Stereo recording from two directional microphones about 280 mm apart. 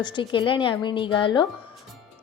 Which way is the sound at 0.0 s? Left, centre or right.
Centre.